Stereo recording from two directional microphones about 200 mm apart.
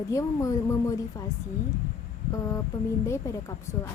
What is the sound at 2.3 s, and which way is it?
Speech, 15° left (ahead or behind).